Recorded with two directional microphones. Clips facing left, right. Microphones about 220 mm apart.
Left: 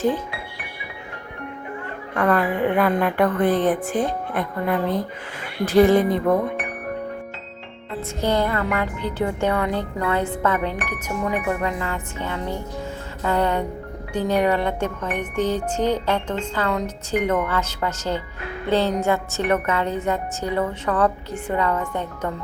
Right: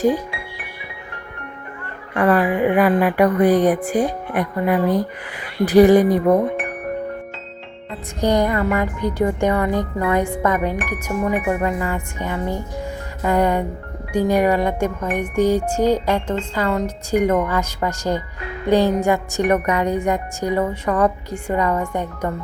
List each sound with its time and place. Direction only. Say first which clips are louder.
2.1 s speech: right 4 dB; 5° right (ahead or behind)
8.2 s speech: right 4 dB; 15° right (ahead or behind)